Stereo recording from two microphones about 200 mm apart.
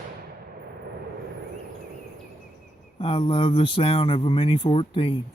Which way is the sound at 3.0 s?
30° left (ahead or behind).